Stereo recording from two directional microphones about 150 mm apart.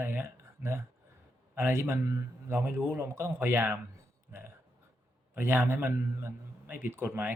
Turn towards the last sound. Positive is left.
turn(degrees=-10)  # may be behind; listen again after turning